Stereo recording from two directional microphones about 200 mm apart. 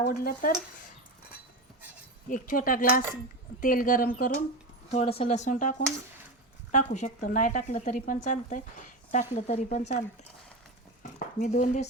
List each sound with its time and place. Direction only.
0.1 s speech: 45° left (ahead or behind)
2.3 s speech: 45° left (ahead or behind)
4.9 s speech: 30° left (ahead or behind); by 10.0 s 45° left (ahead or behind)
11.3 s speech: 40° left (ahead or behind)